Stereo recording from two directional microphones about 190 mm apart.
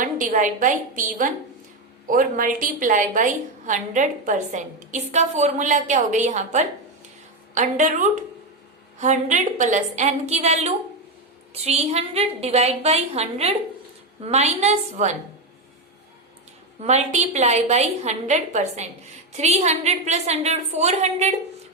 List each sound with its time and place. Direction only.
0.0 s a woman's voice: 45° right (ahead or behind)
16.8 s a woman's voice: 35° right (ahead or behind)